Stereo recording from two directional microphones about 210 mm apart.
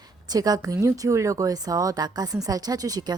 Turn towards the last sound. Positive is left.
turn(degrees=-20)  # may be behind; listen again after turning